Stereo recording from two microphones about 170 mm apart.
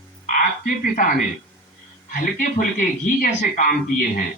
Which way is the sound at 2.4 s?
55° left (ahead or behind).